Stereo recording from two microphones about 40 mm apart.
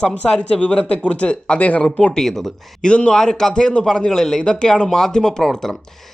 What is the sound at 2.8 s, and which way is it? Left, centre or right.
Speech, left.